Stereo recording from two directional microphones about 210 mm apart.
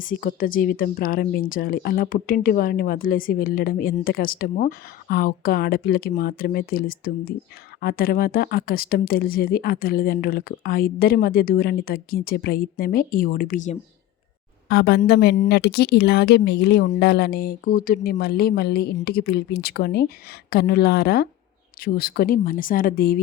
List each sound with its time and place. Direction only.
0.0 s speech: 40° left (ahead or behind)
14.7 s speech: 50° left (ahead or behind)